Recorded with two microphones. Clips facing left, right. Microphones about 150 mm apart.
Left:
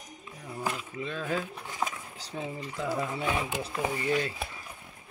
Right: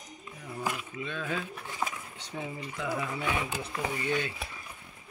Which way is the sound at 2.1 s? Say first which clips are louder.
Left 2 dB; 30° left (ahead or behind).